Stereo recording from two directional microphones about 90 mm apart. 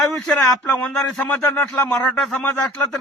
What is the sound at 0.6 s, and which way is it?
A man's voice, 15° left (ahead or behind).